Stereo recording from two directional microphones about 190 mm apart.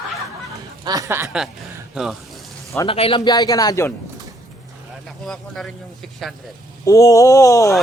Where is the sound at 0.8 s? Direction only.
15° right (ahead or behind).